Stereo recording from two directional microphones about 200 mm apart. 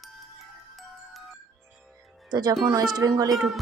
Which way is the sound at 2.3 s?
20° right (ahead or behind).